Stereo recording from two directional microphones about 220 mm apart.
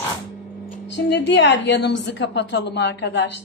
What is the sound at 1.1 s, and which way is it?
A woman's voice, 50° left (ahead or behind).